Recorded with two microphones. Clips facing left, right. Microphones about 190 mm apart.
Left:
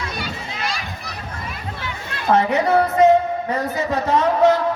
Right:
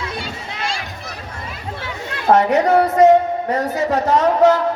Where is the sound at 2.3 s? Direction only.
45° right (ahead or behind).